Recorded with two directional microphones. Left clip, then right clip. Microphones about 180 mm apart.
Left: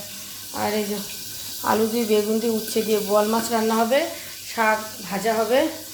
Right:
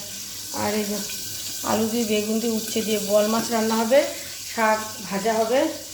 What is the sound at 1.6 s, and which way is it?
Speech, 20° left (ahead or behind).